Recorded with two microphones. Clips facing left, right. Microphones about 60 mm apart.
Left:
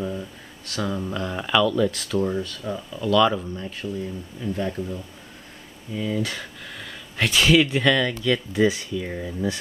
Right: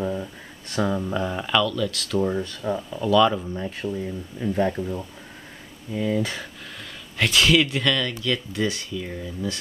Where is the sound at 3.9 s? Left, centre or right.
Right.